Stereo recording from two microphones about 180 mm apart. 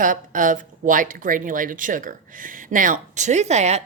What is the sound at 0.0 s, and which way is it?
Speech, 45° right (ahead or behind).